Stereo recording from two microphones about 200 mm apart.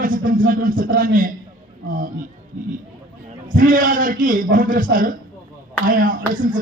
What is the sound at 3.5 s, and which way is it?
A man's voice, 40° right (ahead or behind).